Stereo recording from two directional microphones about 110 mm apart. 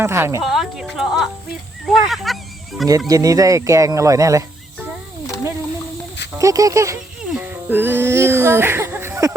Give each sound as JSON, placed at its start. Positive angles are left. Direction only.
{"t": 0.0, "sound": "speech", "side_deg": -25}
{"t": 0.4, "sound": "speech", "side_deg": 0}
{"t": 3.1, "sound": "speech", "side_deg": -35}
{"t": 6.4, "sound": "speech", "side_deg": -30}
{"t": 7.3, "sound": "a sound", "side_deg": -20}